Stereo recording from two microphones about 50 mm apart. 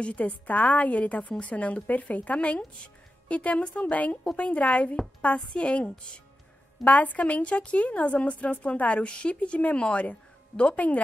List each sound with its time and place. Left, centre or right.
0.0 s a woman's voice: left